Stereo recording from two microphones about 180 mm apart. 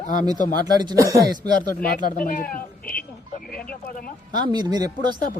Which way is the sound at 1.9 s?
50° left (ahead or behind).